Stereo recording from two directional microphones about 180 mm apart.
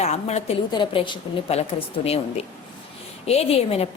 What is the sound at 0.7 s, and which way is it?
A woman's voice, 25° left (ahead or behind).